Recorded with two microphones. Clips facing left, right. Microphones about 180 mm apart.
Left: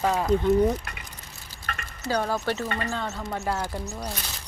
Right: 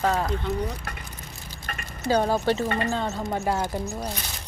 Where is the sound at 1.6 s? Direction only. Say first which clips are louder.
Left 1 dB; 20° right (ahead or behind).